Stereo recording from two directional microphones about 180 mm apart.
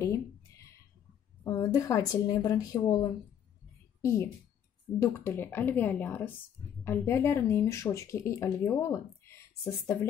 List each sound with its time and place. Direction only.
1.4 s a woman's voice: 20° left (ahead or behind)